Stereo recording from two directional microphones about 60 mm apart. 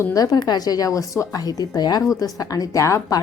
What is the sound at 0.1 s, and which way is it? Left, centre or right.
A woman's voice, left.